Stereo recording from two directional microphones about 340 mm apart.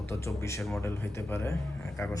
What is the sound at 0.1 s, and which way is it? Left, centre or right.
Speech, centre.